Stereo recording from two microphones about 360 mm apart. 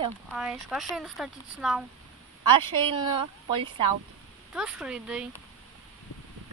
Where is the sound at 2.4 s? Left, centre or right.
Centre.